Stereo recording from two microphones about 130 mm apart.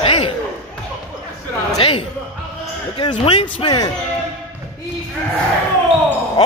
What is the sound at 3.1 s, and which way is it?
Speech, 50° left (ahead or behind).